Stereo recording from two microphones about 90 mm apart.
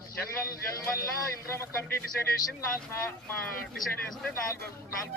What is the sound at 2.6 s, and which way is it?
Speech, 30° left (ahead or behind).